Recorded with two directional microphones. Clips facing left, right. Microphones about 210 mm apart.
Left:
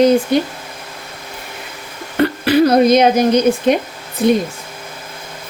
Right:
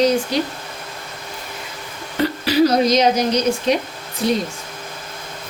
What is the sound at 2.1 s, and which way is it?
Speech, 60° left (ahead or behind).